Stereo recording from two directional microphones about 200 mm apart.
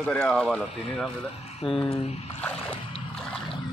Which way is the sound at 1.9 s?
30° left (ahead or behind).